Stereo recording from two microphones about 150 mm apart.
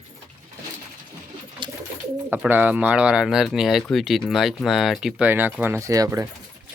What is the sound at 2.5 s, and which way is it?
Speech, 10° right (ahead or behind).